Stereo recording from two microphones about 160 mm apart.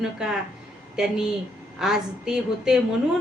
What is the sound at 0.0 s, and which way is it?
A woman's voice, 5° right (ahead or behind).